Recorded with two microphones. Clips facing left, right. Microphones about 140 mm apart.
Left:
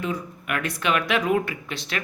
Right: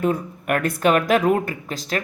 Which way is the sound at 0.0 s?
50° right (ahead or behind).